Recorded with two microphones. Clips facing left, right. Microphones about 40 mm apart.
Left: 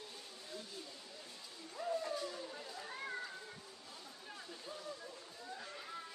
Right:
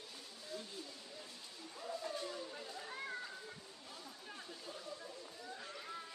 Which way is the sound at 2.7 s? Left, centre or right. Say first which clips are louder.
Left 1 dB; centre.